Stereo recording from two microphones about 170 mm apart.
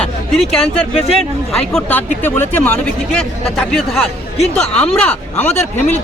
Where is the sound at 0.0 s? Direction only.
Centre (ahead or behind).